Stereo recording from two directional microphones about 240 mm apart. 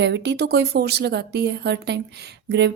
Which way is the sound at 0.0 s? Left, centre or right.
Right.